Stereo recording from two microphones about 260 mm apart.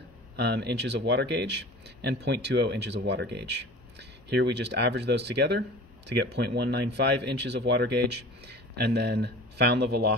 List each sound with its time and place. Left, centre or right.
0.4 s speech: right